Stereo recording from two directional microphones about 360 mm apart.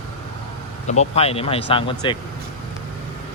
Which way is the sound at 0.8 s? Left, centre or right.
Centre.